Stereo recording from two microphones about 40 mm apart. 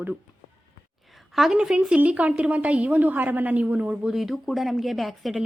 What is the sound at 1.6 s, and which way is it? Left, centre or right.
Speech, centre.